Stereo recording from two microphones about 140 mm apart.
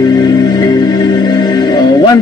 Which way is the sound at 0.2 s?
30° left (ahead or behind).